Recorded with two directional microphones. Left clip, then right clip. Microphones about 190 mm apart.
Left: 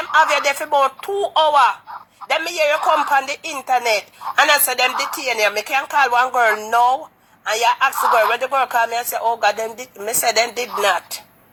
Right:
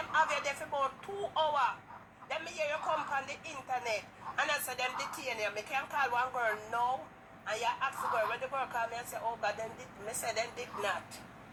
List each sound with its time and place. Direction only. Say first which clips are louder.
0.0 s a woman's voice: left 16 dB; 55° left (ahead or behind)